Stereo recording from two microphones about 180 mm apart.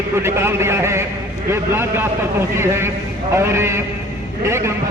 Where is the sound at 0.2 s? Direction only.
15° right (ahead or behind).